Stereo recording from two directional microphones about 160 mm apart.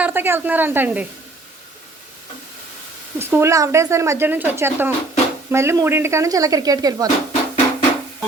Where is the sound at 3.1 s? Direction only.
15° right (ahead or behind).